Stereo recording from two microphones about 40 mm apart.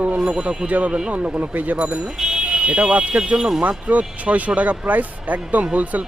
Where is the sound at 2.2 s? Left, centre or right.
Centre.